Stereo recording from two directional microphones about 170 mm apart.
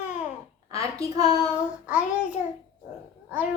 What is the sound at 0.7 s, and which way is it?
Speech, 20° right (ahead or behind).